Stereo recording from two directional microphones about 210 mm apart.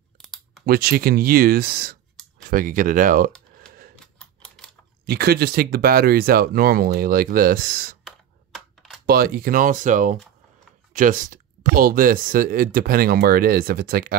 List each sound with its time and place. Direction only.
0.2 s a sound: centre (ahead or behind)
0.7 s speech: 45° right (ahead or behind)
3.6 s a sound: 5° left (ahead or behind)
4.2 s typewriter: 5° left (ahead or behind)
5.0 s speech: 50° right (ahead or behind)
8.0 s computer keyboard: centre (ahead or behind)
9.0 s speech: 45° right (ahead or behind)